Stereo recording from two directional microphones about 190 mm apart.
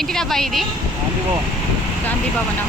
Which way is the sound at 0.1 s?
5° left (ahead or behind).